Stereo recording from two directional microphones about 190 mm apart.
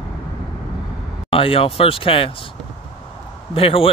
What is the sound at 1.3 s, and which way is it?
Speech, 30° left (ahead or behind).